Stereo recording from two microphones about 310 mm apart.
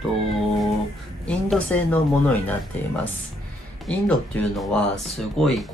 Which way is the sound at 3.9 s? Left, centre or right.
Centre.